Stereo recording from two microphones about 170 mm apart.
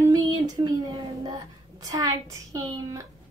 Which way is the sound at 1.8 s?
20° right (ahead or behind).